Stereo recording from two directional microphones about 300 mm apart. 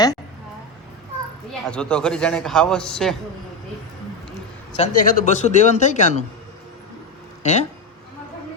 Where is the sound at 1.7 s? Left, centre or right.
Centre.